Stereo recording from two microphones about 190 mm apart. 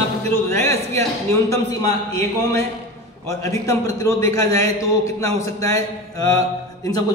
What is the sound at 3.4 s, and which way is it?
A man's voice, 15° left (ahead or behind).